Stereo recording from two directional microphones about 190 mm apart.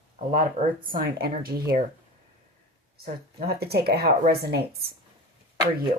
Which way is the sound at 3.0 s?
55° right (ahead or behind).